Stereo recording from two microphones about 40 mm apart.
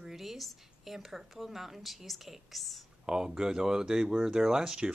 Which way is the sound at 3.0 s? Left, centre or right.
Centre.